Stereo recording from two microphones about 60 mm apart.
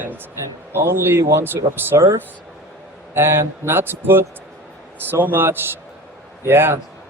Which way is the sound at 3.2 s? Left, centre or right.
Right.